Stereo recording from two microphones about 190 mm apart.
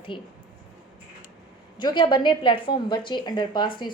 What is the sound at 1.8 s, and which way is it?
A woman's voice, 25° left (ahead or behind).